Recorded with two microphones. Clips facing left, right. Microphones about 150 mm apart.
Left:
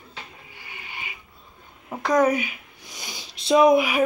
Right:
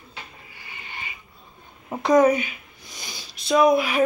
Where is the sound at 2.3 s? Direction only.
10° left (ahead or behind).